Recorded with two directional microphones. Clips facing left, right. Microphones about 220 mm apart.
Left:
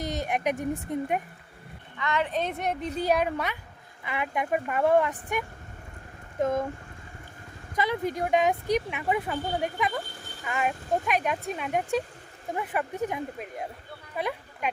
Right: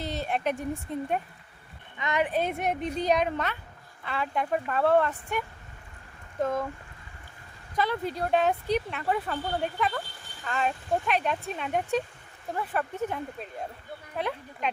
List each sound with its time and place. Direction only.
0.0 s speech: 15° left (ahead or behind)
2.0 s a woman's voice: 20° right (ahead or behind)
2.9 s speech: 5° left (ahead or behind)
7.8 s speech: 15° left (ahead or behind)